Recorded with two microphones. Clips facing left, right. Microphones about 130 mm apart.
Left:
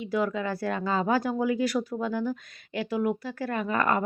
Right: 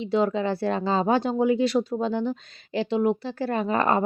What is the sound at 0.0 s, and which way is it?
Speech, 25° right (ahead or behind).